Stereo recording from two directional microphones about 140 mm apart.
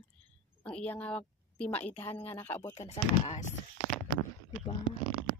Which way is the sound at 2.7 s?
50° left (ahead or behind).